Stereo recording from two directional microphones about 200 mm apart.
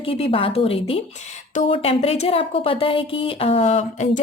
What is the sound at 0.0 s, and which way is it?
Speech, 30° left (ahead or behind).